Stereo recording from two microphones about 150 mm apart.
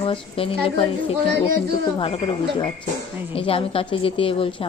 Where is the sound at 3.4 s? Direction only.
40° left (ahead or behind).